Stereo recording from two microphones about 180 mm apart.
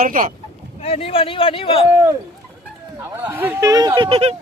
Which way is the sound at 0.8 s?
35° left (ahead or behind).